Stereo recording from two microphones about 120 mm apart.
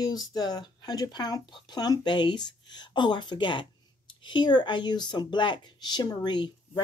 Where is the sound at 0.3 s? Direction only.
35° left (ahead or behind).